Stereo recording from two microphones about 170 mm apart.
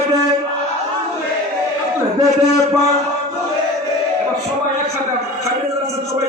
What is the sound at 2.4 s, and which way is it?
Speech, 20° left (ahead or behind).